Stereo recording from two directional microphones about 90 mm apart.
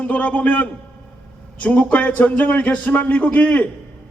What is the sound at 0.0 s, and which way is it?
A man's voice, 15° left (ahead or behind).